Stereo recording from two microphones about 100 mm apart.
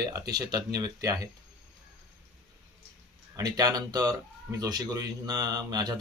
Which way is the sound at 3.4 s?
40° right (ahead or behind).